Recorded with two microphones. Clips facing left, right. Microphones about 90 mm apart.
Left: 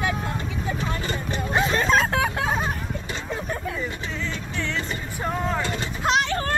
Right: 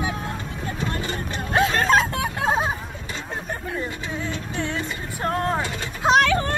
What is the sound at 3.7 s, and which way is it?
Music, 50° right (ahead or behind).